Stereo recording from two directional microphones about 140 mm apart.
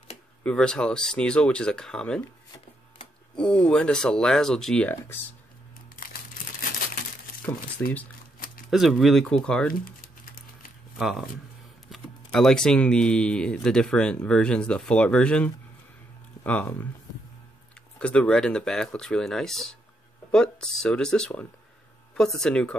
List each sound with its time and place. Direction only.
0.4 s speech: 5° left (ahead or behind)
3.3 s speech: 5° left (ahead or behind)
7.8 s speech: 15° left (ahead or behind)
8.6 s speech: centre (ahead or behind)
11.0 s speech: 5° right (ahead or behind)
17.9 s speech: 10° left (ahead or behind)